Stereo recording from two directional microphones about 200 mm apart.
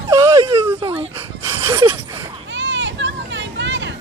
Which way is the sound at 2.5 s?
65° right (ahead or behind).